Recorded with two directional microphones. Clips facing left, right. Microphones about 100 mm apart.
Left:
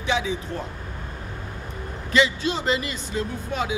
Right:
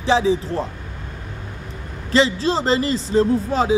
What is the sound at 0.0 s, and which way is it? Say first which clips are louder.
Speech: right 8 dB; 30° right (ahead or behind).